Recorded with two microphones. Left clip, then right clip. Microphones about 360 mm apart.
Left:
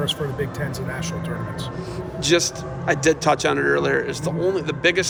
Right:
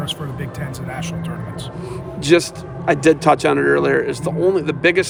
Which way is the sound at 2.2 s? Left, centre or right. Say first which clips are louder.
Right 4 dB; right.